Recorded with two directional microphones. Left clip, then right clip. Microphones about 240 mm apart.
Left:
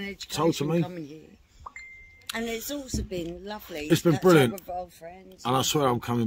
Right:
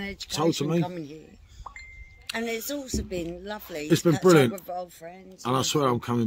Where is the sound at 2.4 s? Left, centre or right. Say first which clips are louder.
Right 2 dB; right.